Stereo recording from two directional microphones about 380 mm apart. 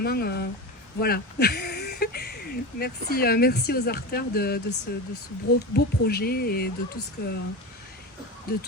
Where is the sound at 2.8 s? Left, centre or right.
Left.